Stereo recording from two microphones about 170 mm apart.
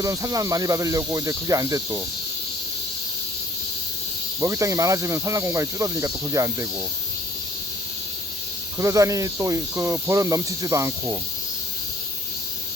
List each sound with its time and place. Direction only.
0.0 s speech: 20° right (ahead or behind)
4.4 s speech: 20° right (ahead or behind)
8.8 s speech: 20° right (ahead or behind)